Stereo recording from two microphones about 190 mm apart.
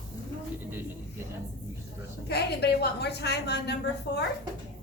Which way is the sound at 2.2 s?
60° left (ahead or behind).